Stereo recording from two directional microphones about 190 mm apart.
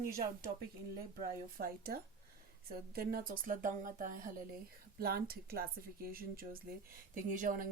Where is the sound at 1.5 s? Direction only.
50° right (ahead or behind).